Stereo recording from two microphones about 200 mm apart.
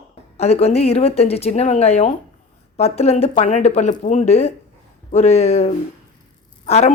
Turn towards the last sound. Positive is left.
turn(degrees=30)  # may be behind; listen again after turning